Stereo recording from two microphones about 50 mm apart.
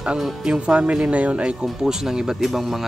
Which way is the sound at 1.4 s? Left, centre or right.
Centre.